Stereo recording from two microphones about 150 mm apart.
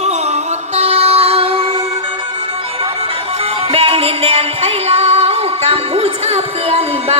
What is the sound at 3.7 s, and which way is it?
Music, 40° right (ahead or behind).